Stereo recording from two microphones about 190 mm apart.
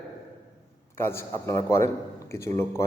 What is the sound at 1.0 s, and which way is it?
A man's voice, 10° left (ahead or behind).